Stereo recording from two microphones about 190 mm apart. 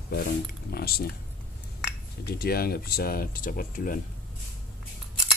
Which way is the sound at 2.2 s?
55° left (ahead or behind).